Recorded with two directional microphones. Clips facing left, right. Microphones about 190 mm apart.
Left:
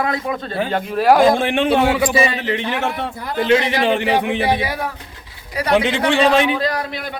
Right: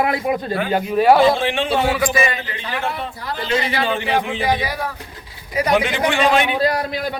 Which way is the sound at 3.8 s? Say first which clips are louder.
Left 3 dB; 65° left (ahead or behind).